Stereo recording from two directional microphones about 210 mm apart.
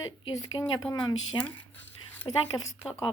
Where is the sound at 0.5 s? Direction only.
15° left (ahead or behind).